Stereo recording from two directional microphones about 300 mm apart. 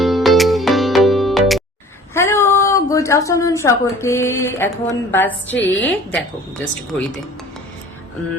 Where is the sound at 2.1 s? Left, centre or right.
Centre.